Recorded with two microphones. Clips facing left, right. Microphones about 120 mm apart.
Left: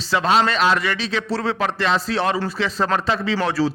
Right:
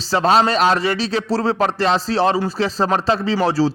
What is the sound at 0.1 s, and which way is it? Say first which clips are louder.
A man's voice: right 3 dB; 35° right (ahead or behind).